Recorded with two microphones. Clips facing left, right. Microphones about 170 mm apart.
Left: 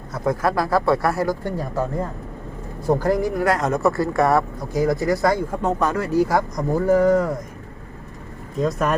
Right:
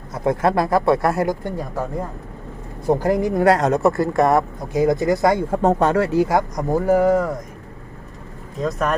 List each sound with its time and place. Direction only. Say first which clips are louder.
0.3 s speech: right 2 dB; 25° right (ahead or behind)
2.8 s speech: right 1 dB; 20° right (ahead or behind)
5.5 s speech: right 5 dB; 30° right (ahead or behind)
6.9 s speech: even; 5° right (ahead or behind)
8.5 s speech: left 1 dB; centre (ahead or behind)